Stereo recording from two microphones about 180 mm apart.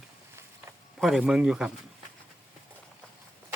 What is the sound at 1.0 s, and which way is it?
Speech, centre (ahead or behind).